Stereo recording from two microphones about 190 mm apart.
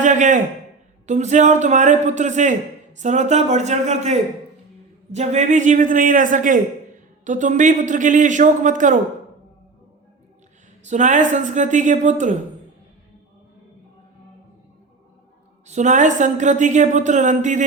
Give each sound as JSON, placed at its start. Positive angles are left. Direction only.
{"t": 0.0, "sound": "a sound", "side_deg": -40}
{"t": 1.0, "sound": "a woman's voice", "side_deg": -40}
{"t": 10.8, "sound": "a woman's voice", "side_deg": -40}
{"t": 15.6, "sound": "a woman's voice", "side_deg": -40}